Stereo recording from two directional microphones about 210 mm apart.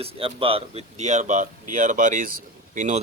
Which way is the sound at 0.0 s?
30° right (ahead or behind).